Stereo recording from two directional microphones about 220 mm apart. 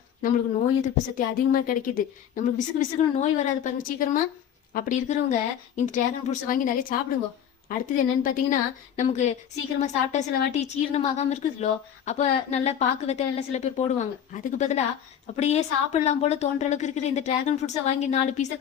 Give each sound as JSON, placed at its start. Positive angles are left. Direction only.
{"t": 0.2, "sound": "a woman's voice", "side_deg": 40}